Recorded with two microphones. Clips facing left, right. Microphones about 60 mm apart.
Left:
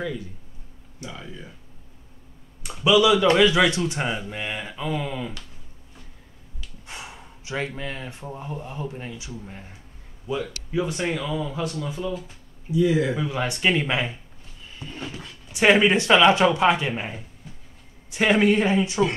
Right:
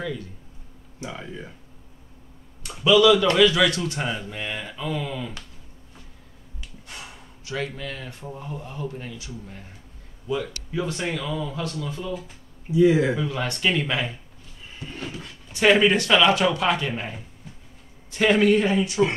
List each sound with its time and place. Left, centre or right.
1.0 s speech: centre
2.8 s a man's voice: centre
6.9 s speech: left
10.7 s a man's voice: centre
12.7 s speech: right
13.1 s a man's voice: centre
15.5 s speech: centre